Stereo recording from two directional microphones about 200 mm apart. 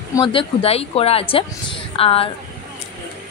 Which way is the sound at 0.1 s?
25° left (ahead or behind).